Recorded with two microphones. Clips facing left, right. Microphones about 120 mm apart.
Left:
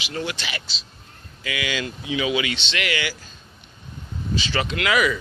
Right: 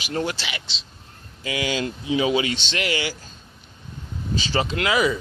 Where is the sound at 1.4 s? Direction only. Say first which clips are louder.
Right 3 dB; 35° right (ahead or behind).